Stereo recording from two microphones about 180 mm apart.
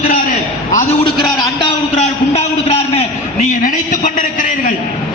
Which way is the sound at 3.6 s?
45° left (ahead or behind).